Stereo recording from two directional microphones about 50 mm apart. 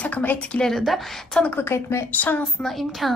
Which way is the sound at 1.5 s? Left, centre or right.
Left.